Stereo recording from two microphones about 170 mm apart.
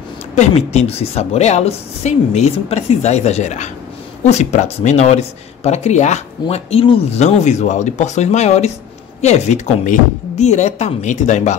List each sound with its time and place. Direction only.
0.4 s a woman's voice: 40° left (ahead or behind)